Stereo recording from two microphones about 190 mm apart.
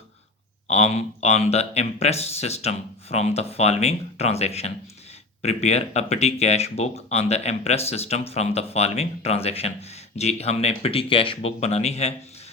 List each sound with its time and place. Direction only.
0.7 s speech: 35° left (ahead or behind)